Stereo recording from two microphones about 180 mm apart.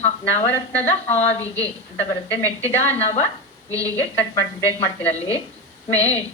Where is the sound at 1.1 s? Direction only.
35° left (ahead or behind).